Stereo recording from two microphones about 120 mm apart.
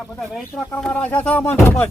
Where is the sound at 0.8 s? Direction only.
10° left (ahead or behind).